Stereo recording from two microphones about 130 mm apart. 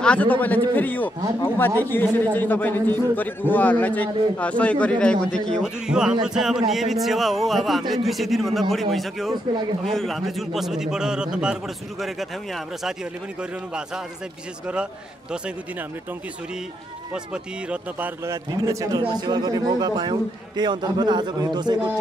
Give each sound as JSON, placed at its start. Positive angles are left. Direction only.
{"t": 0.0, "sound": "a man's voice", "side_deg": 10}
{"t": 5.9, "sound": "a man's voice", "side_deg": -5}
{"t": 17.1, "sound": "a man's voice", "side_deg": -10}